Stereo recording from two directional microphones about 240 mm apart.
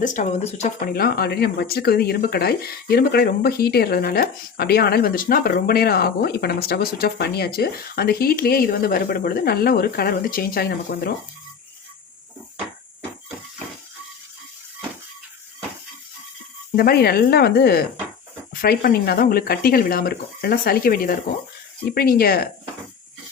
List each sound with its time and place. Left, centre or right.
0.0 s speech: left
0.9 s speech: left
16.7 s speech: left